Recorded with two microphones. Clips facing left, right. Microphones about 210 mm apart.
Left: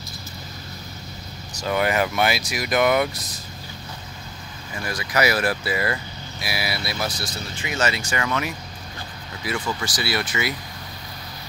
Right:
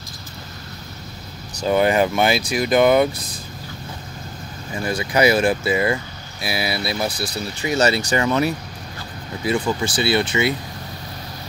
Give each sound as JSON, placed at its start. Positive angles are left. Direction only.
{"t": 1.6, "sound": "speech", "side_deg": -30}
{"t": 4.7, "sound": "speech", "side_deg": -30}